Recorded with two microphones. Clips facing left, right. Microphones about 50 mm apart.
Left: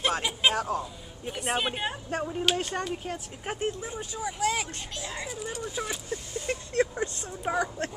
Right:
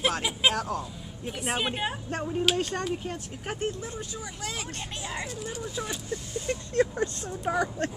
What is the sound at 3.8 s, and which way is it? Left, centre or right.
Speech, centre.